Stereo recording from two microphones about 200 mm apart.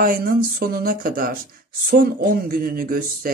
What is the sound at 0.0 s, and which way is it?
Speech, 45° right (ahead or behind).